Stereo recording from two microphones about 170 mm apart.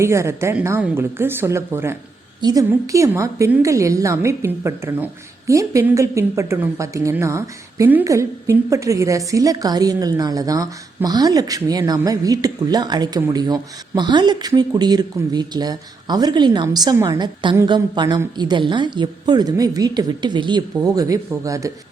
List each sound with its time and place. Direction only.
0.0 s a woman's voice: 15° right (ahead or behind)